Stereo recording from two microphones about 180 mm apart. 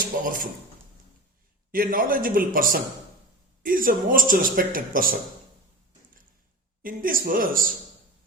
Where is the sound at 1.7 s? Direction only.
50° right (ahead or behind).